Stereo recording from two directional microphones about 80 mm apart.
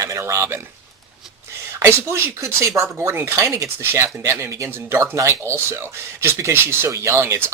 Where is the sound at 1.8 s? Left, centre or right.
Right.